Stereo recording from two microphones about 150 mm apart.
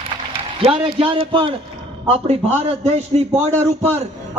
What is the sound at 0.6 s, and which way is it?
A man's voice, 35° right (ahead or behind).